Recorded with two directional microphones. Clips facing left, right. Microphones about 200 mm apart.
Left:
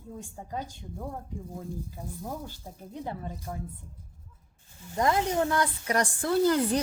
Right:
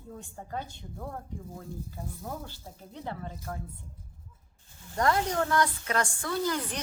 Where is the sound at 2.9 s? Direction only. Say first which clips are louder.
Left 2 dB; 15° left (ahead or behind).